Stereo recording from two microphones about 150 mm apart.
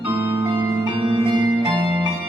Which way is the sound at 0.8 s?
35° right (ahead or behind).